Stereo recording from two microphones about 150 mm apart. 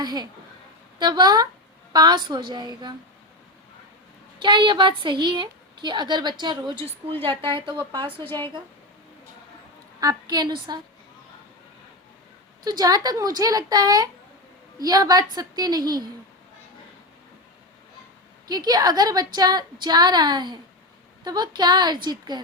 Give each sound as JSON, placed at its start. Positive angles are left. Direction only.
{"t": 0.0, "sound": "a woman's voice", "side_deg": -25}
{"t": 4.4, "sound": "a woman's voice", "side_deg": -30}
{"t": 10.0, "sound": "a woman's voice", "side_deg": -25}
{"t": 12.6, "sound": "a woman's voice", "side_deg": -25}
{"t": 18.4, "sound": "a woman's voice", "side_deg": -25}